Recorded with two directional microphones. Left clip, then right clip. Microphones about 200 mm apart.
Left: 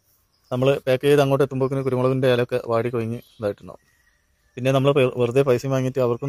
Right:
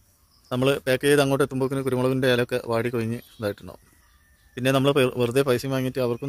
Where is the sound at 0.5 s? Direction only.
15° right (ahead or behind).